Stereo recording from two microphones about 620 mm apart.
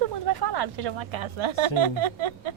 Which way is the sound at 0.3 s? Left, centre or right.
Right.